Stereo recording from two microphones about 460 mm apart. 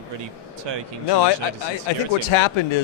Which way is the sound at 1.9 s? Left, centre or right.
Left.